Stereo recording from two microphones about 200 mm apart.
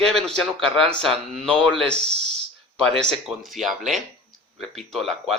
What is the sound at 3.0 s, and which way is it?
Speech, centre (ahead or behind).